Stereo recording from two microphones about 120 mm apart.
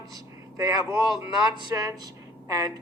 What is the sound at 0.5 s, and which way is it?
A man's voice, 30° right (ahead or behind).